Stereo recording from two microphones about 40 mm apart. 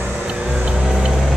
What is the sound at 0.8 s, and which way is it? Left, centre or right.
Vehicle, centre.